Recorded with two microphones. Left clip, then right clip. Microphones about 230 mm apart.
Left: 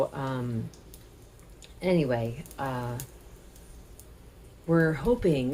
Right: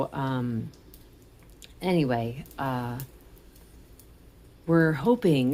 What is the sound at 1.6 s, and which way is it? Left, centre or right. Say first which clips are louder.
Speech: even; right.